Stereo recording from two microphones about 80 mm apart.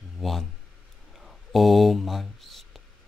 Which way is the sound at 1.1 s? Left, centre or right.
Centre.